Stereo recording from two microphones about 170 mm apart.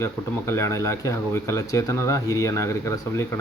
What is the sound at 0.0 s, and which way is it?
Speech, 15° left (ahead or behind).